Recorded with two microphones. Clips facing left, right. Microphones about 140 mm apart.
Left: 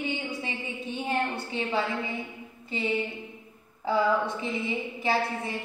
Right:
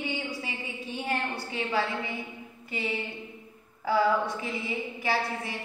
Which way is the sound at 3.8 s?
25° left (ahead or behind).